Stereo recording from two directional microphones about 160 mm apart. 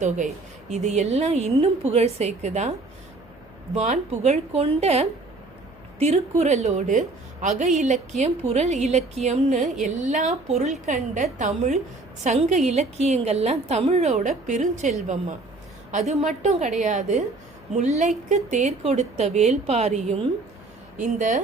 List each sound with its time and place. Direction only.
0.7 s a woman's voice: 45° right (ahead or behind)
3.8 s a woman's voice: 45° right (ahead or behind)
21.2 s a woman's voice: 50° right (ahead or behind)